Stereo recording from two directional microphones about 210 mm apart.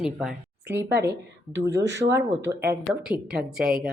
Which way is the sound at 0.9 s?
55° right (ahead or behind).